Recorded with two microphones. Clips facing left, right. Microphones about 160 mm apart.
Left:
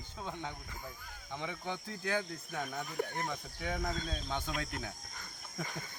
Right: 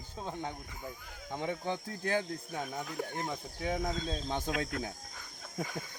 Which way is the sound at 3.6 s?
25° right (ahead or behind).